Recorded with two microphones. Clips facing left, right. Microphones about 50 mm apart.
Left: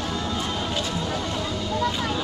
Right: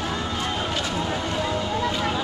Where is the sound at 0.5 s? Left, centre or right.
Right.